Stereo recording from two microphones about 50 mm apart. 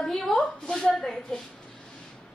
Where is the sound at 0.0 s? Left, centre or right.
Centre.